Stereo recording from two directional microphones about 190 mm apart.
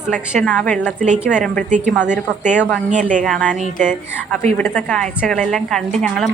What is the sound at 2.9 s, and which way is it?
Speech, 40° right (ahead or behind).